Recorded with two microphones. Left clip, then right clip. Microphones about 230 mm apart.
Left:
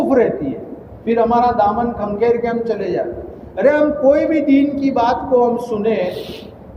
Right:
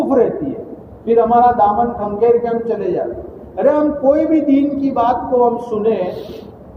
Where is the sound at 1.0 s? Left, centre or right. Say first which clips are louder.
Right 3 dB; left.